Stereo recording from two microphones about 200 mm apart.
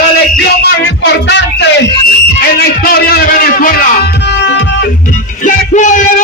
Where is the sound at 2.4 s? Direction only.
50° left (ahead or behind).